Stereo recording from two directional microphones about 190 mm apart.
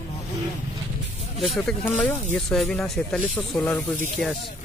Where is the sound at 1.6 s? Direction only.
5° left (ahead or behind).